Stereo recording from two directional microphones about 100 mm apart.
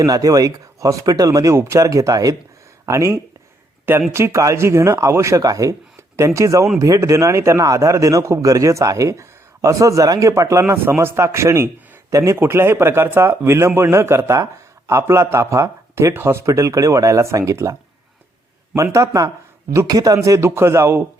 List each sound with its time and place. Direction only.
0.0 s a man's voice: 35° right (ahead or behind)
18.8 s a man's voice: 30° right (ahead or behind)